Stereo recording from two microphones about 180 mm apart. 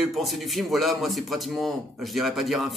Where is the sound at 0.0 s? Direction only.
Centre (ahead or behind).